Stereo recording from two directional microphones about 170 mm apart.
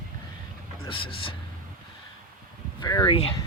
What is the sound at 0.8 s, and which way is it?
Speech, 30° left (ahead or behind).